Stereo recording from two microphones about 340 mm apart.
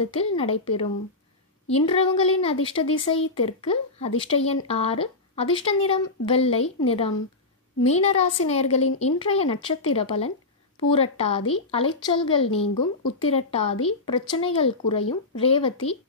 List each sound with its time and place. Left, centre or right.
0.0 s a woman's voice: centre